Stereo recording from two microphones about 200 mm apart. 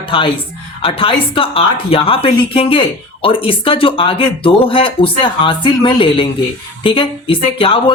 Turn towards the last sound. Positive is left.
turn(degrees=25)  # may be behind; listen again after turning